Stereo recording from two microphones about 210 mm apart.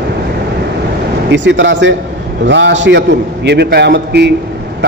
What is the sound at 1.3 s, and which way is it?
A man's voice, 60° right (ahead or behind).